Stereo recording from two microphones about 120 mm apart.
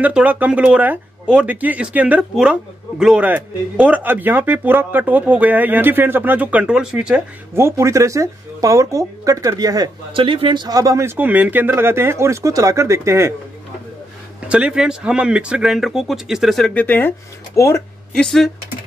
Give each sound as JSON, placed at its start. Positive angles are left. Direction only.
{"t": 0.0, "sound": "speech", "side_deg": -10}
{"t": 7.5, "sound": "speech", "side_deg": -20}
{"t": 10.1, "sound": "speech", "side_deg": -45}
{"t": 14.5, "sound": "speech", "side_deg": -10}
{"t": 16.7, "sound": "speech", "side_deg": 15}
{"t": 18.1, "sound": "speech", "side_deg": 5}